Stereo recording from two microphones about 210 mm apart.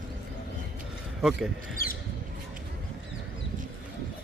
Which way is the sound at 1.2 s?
Centre (ahead or behind).